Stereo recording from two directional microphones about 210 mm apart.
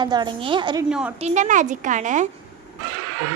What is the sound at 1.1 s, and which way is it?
A woman's voice, 35° right (ahead or behind).